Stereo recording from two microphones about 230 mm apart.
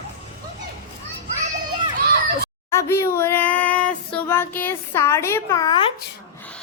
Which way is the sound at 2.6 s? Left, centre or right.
Centre.